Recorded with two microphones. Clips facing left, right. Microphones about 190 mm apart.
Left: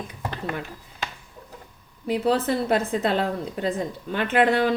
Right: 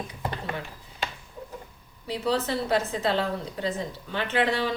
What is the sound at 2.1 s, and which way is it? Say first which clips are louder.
Speech: left 5 dB; 55° left (ahead or behind).